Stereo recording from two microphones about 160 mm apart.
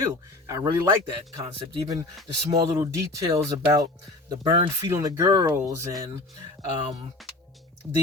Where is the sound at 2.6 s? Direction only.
20° right (ahead or behind).